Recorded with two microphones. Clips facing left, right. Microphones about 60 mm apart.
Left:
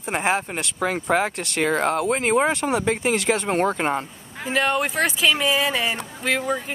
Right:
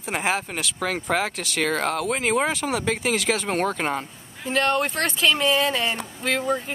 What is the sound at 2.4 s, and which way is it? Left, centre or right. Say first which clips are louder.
Speech: left 3 dB; centre.